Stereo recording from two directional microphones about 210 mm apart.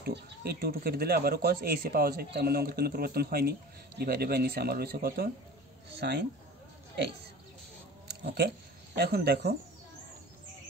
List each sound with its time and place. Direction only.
0.0 s speech: 50° right (ahead or behind)
8.1 s speech: 50° right (ahead or behind)